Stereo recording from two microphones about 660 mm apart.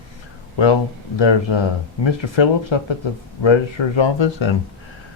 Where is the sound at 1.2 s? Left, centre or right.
Left.